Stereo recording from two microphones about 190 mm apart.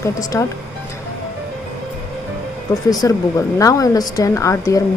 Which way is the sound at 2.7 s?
15° left (ahead or behind).